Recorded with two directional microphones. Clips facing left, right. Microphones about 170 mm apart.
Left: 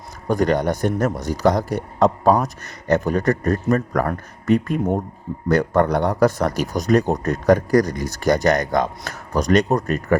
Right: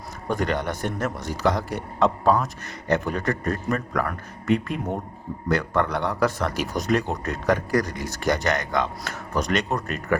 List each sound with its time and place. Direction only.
0.3 s a man's voice: 40° left (ahead or behind)